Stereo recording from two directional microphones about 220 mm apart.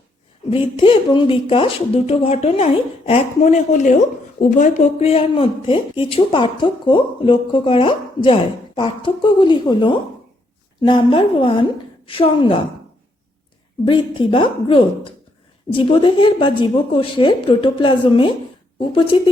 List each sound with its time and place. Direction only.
0.5 s speech: 25° left (ahead or behind)
13.8 s speech: 25° left (ahead or behind)